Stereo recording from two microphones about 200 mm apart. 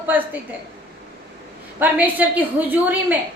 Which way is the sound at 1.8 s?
10° right (ahead or behind).